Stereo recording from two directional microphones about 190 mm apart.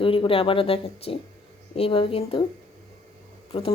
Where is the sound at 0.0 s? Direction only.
30° left (ahead or behind).